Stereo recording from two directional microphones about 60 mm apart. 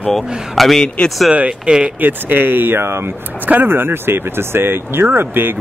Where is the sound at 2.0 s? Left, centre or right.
Right.